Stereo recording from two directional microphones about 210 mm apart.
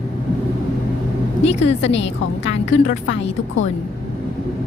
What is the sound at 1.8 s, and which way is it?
A woman's voice, 60° left (ahead or behind).